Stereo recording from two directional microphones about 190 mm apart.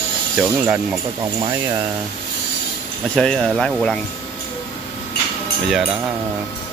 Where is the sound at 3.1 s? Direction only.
5° left (ahead or behind).